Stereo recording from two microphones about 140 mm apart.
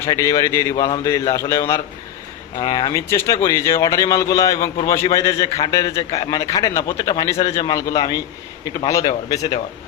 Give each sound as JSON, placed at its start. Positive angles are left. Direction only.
{"t": 0.0, "sound": "a man's voice", "side_deg": 25}